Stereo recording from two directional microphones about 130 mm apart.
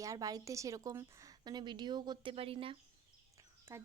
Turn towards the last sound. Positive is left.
turn(degrees=-20)  # may be behind; listen again after turning